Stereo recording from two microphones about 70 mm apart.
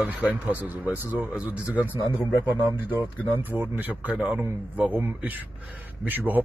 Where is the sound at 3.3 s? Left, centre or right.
Right.